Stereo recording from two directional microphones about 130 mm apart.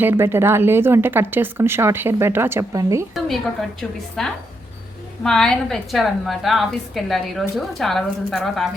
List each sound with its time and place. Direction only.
0.0 s speech: 15° right (ahead or behind)
3.2 s a woman's voice: centre (ahead or behind)